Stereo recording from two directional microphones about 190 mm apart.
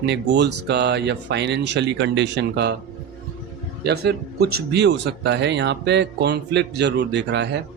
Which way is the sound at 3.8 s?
60° right (ahead or behind).